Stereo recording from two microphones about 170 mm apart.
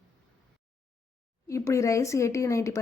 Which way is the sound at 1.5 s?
20° left (ahead or behind).